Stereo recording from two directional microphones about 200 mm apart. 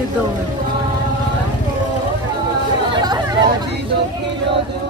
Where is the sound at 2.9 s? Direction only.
20° right (ahead or behind).